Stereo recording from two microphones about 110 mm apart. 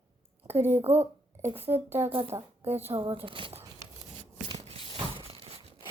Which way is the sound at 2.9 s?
50° right (ahead or behind).